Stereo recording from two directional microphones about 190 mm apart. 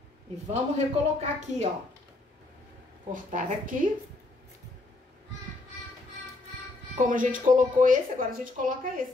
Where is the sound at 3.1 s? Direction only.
45° right (ahead or behind).